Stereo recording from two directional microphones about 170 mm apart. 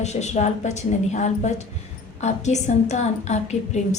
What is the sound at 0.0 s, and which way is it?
A woman's voice, 40° left (ahead or behind).